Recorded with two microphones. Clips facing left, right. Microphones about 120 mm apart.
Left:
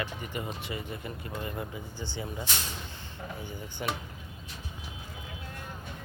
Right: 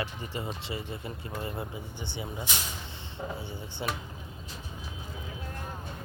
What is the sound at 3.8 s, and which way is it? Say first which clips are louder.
Speech: even; 20° right (ahead or behind).